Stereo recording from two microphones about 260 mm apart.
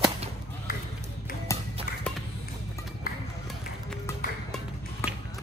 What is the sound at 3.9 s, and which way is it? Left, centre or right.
Music, centre.